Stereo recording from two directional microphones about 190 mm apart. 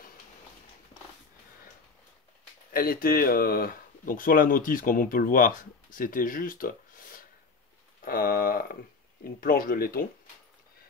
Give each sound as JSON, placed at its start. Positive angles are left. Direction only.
{"t": 2.7, "sound": "speech", "side_deg": 50}